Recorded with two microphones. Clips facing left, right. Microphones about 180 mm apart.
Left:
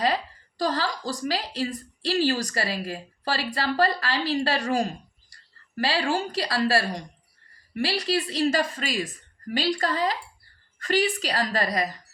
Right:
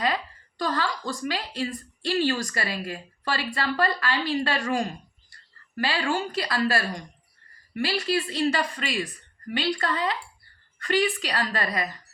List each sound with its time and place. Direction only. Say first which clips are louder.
0.0 s a woman's voice: left 2 dB; 35° left (ahead or behind)